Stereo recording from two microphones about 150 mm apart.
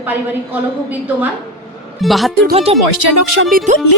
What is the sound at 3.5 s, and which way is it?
Speech, 50° right (ahead or behind).